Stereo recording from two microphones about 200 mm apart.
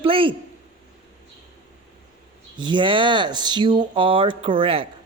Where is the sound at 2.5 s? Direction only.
25° right (ahead or behind).